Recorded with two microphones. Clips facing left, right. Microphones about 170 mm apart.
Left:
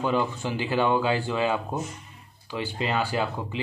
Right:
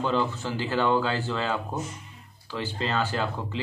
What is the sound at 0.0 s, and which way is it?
Speech, 15° left (ahead or behind).